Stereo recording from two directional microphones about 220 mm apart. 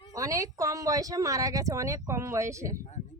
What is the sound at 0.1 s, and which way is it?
Speech, 15° right (ahead or behind).